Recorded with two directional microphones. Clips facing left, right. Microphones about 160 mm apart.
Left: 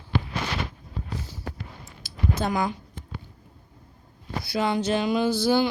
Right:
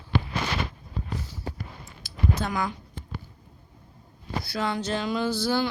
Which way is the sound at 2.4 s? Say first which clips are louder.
Left 3 dB; 25° left (ahead or behind).